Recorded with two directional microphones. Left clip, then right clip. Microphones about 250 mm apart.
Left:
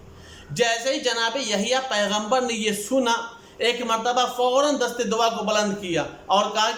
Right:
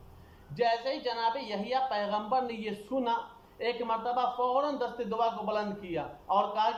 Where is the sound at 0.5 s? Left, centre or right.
Left.